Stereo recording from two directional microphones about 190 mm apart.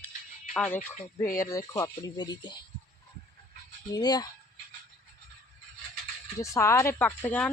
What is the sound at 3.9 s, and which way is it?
Speech, 20° left (ahead or behind).